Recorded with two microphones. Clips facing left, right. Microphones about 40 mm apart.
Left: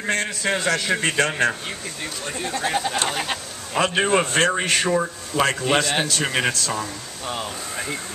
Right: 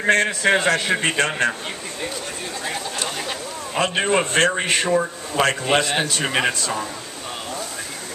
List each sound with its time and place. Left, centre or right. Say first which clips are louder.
0.0 s a man's voice: right 6 dB; right
2.6 s speech: left 5 dB; centre
3.7 s a man's voice: left 1 dB; centre
5.3 s a man's voice: right 1 dB; centre